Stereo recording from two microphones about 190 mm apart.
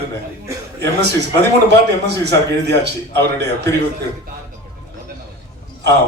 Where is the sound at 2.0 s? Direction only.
60° right (ahead or behind).